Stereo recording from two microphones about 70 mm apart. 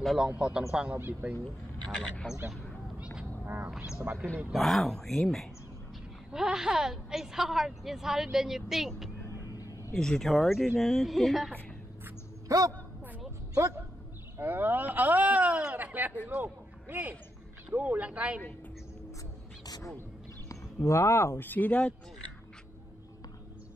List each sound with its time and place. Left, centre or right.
0.0 s a woman's voice: centre
0.4 s a man's voice: centre
1.2 s speech: right
3.4 s speech: right
4.5 s a woman's voice: centre
6.3 s a woman's voice: centre
9.4 s a sound: left
9.9 s a woman's voice: centre
12.4 s a man's voice: right
14.4 s a man's voice: right
20.4 s speech: left; by 21.9 s centre